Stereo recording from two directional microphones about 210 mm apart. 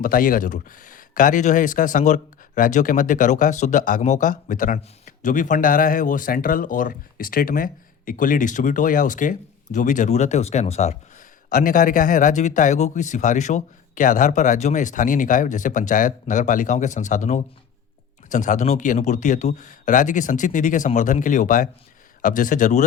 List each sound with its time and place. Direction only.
0.0 s speech: 40° left (ahead or behind)